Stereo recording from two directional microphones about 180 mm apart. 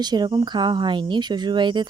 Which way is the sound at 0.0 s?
25° right (ahead or behind).